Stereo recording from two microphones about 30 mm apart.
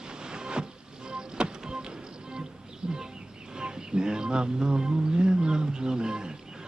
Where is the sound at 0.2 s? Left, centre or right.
Right.